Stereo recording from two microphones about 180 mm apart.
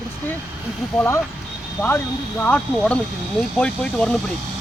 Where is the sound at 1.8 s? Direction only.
10° left (ahead or behind).